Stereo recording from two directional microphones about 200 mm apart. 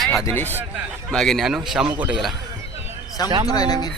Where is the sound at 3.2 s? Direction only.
20° left (ahead or behind).